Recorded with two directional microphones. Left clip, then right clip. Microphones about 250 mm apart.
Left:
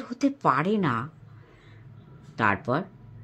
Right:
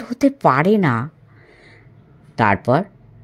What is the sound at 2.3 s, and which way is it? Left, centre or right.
Speech, right.